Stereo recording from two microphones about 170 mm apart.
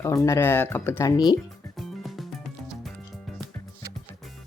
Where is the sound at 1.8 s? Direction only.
Centre (ahead or behind).